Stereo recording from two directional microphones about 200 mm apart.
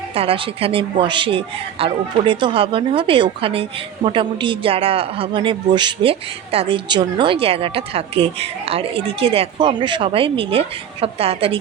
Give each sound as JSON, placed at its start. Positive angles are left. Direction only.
{"t": 0.1, "sound": "a woman's voice", "side_deg": -30}